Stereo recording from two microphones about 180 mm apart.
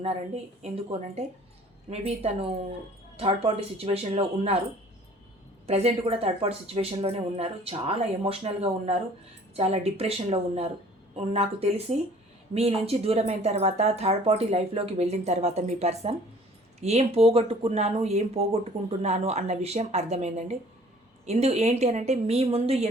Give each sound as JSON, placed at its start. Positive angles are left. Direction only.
{"t": 0.6, "sound": "speech", "side_deg": -35}
{"t": 5.6, "sound": "speech", "side_deg": -35}